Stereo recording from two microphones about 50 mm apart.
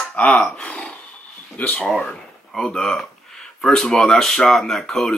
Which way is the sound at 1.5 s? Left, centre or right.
Left.